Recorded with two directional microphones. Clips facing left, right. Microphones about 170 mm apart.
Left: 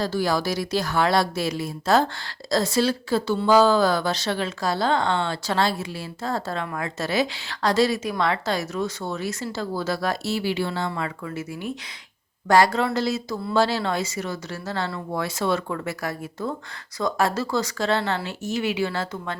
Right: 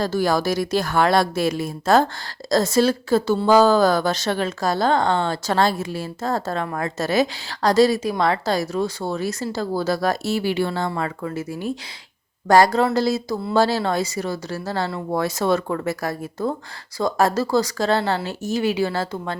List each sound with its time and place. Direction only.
0.0 s a woman's voice: 50° right (ahead or behind)